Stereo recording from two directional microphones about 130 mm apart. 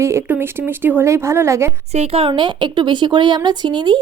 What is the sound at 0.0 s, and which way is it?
A woman's voice, 20° right (ahead or behind).